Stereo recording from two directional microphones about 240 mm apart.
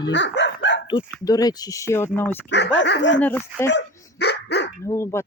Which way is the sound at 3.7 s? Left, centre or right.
Left.